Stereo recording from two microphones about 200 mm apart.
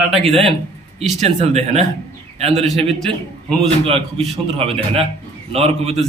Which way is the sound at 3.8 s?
30° right (ahead or behind).